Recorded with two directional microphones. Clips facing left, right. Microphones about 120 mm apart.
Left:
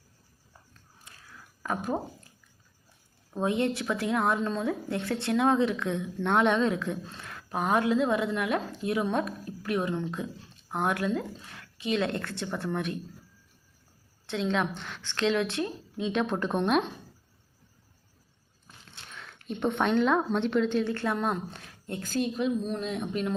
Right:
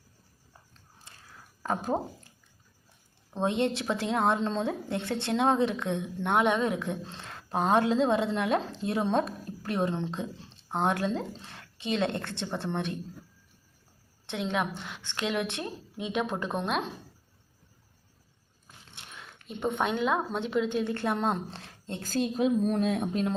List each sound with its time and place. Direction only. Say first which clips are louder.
1.6 s speech: right 1 dB; 30° right (ahead or behind)
3.3 s speech: even; 25° right (ahead or behind)
14.3 s a woman's voice: left 2 dB; 20° right (ahead or behind); by 16.8 s centre (ahead or behind)
19.5 s a woman's voice: left 2 dB; 5° right (ahead or behind)
20.9 s speech: even; 25° right (ahead or behind)
22.0 s a woman's voice: right 2 dB; 40° right (ahead or behind)